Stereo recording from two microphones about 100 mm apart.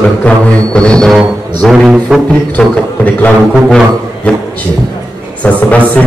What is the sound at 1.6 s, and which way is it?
Music, 5° right (ahead or behind).